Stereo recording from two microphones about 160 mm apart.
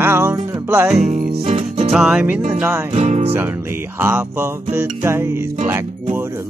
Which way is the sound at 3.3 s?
15° right (ahead or behind).